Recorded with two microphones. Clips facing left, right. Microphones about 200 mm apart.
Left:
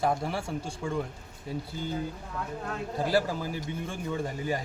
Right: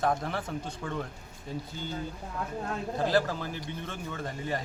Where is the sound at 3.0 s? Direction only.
10° left (ahead or behind).